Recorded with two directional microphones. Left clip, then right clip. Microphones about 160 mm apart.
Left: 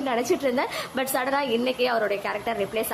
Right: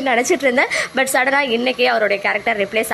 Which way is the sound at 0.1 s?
20° right (ahead or behind).